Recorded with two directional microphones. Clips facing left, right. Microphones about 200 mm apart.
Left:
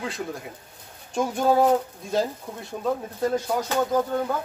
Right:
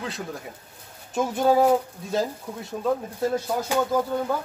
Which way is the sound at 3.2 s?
5° right (ahead or behind).